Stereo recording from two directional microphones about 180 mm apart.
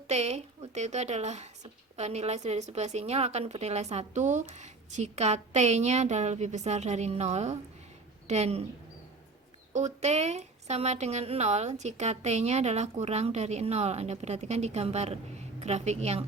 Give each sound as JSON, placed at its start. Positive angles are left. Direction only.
{"t": 0.1, "sound": "a woman's voice", "side_deg": -40}
{"t": 9.7, "sound": "a woman's voice", "side_deg": -40}